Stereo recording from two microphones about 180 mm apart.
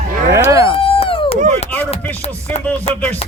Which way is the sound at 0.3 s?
15° right (ahead or behind).